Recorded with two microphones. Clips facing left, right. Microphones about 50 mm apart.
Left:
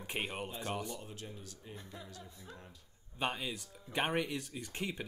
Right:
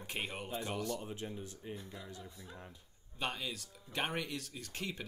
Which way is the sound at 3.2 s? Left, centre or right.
Centre.